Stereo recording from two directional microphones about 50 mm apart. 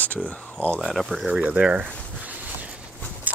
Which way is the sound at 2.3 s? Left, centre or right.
Right.